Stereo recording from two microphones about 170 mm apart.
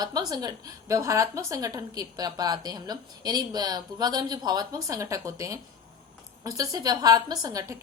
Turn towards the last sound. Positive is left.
turn(degrees=-20)  # may be behind; listen again after turning